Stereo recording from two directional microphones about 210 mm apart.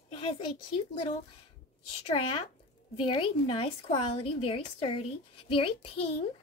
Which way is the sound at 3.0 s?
25° left (ahead or behind).